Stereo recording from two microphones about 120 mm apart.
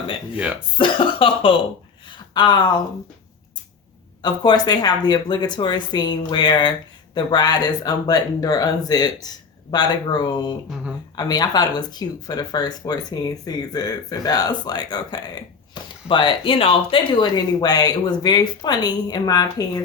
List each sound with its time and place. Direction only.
0.3 s speech: 10° right (ahead or behind)
0.8 s cough: 45° left (ahead or behind)
2.0 s a sound: 40° left (ahead or behind)
4.2 s speech: 35° left (ahead or behind)